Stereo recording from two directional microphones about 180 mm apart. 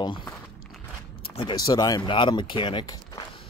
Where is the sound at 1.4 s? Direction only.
25° left (ahead or behind).